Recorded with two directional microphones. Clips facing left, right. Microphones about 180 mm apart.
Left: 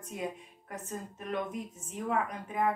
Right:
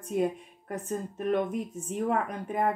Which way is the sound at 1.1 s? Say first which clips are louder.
Right 8 dB; 55° right (ahead or behind).